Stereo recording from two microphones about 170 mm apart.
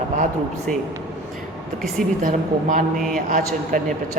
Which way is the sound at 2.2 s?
50° right (ahead or behind).